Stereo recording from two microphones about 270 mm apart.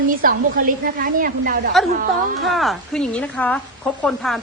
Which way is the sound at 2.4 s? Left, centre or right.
Centre.